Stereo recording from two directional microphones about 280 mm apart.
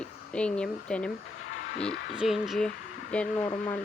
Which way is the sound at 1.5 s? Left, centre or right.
Left.